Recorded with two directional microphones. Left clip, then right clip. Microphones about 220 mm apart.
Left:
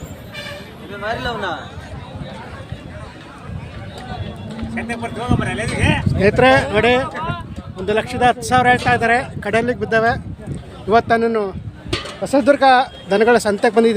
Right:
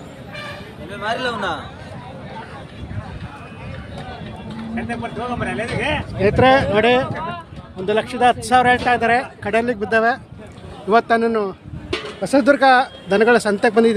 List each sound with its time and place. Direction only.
1.0 s speech: 55° right (ahead or behind)
4.7 s speech: 50° left (ahead or behind)
6.2 s speech: centre (ahead or behind)
7.1 s a sound: 35° left (ahead or behind)
7.9 s speech: centre (ahead or behind)
11.9 s a sound: 50° left (ahead or behind)
12.2 s speech: 5° right (ahead or behind)